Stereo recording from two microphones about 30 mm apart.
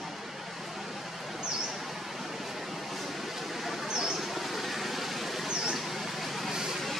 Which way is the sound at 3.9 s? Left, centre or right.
Centre.